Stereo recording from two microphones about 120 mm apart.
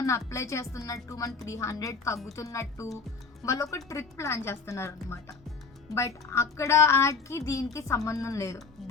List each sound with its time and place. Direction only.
0.0 s a woman's voice: 25° left (ahead or behind)